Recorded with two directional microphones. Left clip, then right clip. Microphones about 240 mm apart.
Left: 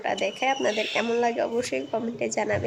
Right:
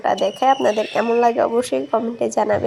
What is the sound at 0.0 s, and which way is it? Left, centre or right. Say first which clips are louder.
Speech: right 8 dB; centre.